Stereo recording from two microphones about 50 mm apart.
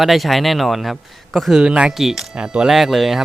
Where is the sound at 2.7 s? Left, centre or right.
Centre.